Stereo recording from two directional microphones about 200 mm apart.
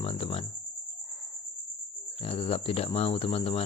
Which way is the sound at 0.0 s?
25° left (ahead or behind).